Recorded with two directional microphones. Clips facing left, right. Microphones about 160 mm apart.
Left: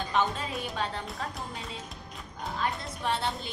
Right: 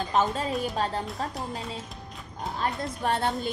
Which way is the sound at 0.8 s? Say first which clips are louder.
Right 2 dB; 40° right (ahead or behind).